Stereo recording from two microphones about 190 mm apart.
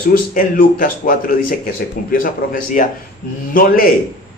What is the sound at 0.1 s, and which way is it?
Speech, 45° left (ahead or behind).